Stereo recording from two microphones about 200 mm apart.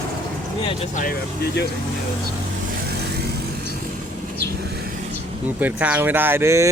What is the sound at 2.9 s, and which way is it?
Vehicle, 55° right (ahead or behind).